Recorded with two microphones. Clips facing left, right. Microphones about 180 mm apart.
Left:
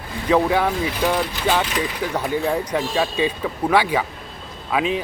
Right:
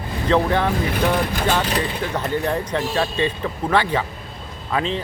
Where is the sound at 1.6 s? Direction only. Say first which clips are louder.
Right 2 dB; 35° right (ahead or behind).